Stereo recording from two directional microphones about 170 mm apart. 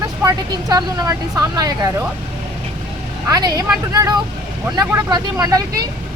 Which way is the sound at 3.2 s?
20° right (ahead or behind).